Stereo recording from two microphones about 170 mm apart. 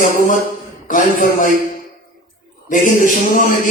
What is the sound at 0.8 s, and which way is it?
Speech, 50° left (ahead or behind).